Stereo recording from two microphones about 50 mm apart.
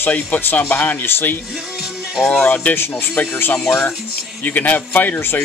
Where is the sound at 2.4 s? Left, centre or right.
Left.